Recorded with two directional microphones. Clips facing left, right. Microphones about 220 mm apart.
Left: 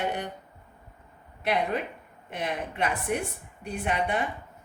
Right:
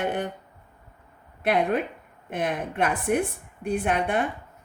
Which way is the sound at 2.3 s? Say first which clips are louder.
Right 4 dB; 50° right (ahead or behind).